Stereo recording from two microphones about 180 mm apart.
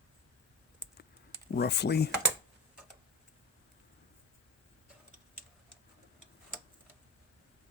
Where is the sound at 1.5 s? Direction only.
65° left (ahead or behind).